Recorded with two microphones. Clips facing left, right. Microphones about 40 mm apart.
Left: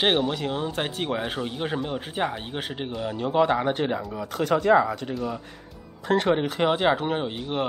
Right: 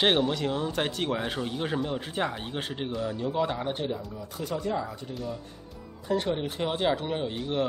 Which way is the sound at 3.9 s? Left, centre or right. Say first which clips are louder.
Left 6 dB; left.